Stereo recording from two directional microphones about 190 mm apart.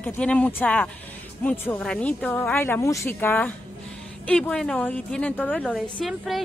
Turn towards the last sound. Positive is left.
turn(degrees=0)  # may be behind; listen again after turning